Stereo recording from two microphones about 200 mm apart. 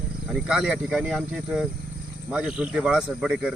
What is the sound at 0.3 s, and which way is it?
Speech, centre (ahead or behind).